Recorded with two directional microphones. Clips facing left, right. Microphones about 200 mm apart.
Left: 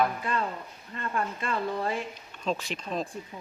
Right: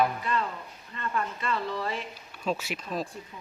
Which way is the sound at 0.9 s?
45° left (ahead or behind).